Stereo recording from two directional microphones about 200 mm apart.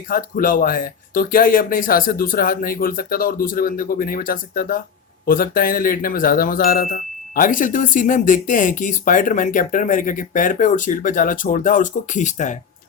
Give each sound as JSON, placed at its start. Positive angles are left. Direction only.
{"t": 0.1, "sound": "speech", "side_deg": 45}